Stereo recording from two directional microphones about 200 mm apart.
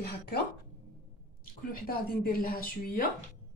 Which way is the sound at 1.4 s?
45° left (ahead or behind).